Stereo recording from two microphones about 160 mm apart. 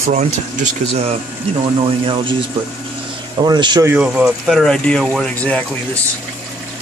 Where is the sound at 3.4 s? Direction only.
25° right (ahead or behind).